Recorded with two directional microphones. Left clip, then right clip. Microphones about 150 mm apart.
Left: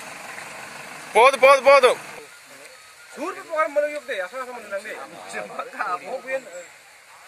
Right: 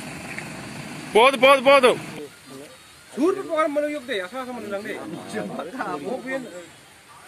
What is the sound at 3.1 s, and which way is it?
Speech, 40° left (ahead or behind).